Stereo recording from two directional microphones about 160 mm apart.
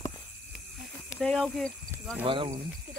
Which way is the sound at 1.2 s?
5° left (ahead or behind).